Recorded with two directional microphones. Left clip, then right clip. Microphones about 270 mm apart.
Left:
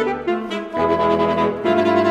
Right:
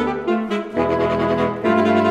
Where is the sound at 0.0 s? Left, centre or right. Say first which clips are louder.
Even; centre.